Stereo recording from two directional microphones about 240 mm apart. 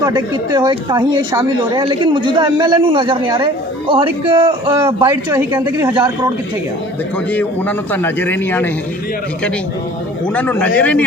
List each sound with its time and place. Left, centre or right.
0.0 s speech: centre
5.3 s a woman's voice: centre
7.3 s a man's voice: centre
10.2 s a man's voice: centre